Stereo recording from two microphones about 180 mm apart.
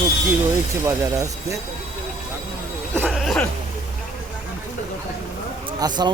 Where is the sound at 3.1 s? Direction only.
Centre (ahead or behind).